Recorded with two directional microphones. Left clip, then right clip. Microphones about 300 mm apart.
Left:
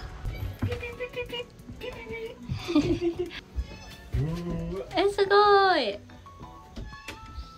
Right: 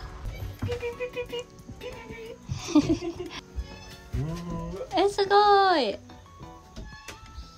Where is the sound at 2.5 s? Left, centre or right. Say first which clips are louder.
Right 2 dB; centre.